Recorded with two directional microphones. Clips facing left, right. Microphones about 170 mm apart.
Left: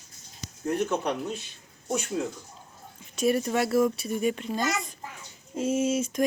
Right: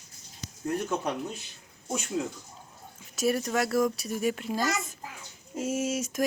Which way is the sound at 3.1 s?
Centre (ahead or behind).